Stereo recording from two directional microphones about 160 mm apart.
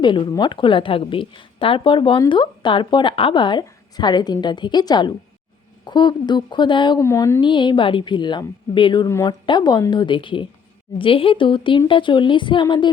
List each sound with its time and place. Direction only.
0.0 s a woman's voice: 30° left (ahead or behind)
7.0 s speech: 15° left (ahead or behind)
7.4 s a woman's voice: 30° left (ahead or behind)
9.0 s a woman's voice: 15° left (ahead or behind)